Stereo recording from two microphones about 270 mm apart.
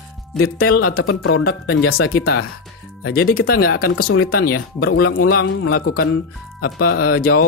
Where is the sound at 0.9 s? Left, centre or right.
Left.